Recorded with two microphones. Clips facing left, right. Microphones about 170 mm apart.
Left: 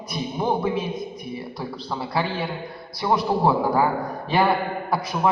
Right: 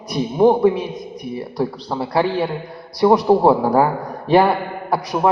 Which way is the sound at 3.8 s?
40° right (ahead or behind).